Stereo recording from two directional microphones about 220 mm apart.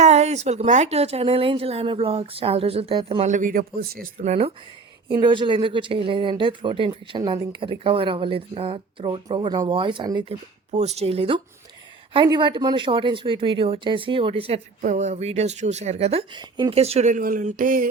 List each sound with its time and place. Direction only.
0.0 s speech: 30° right (ahead or behind)
4.2 s speech: 30° right (ahead or behind)